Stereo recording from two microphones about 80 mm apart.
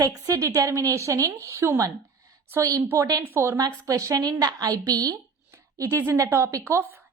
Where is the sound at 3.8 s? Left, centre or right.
Right.